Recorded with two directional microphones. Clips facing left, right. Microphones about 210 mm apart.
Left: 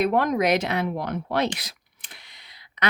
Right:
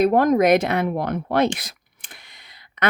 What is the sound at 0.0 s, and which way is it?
Speech, 45° right (ahead or behind).